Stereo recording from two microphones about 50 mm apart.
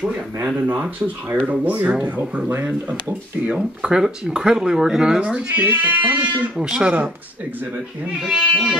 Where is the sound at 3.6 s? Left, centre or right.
Centre.